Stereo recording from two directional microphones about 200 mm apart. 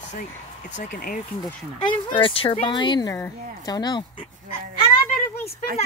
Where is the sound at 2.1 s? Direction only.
25° left (ahead or behind).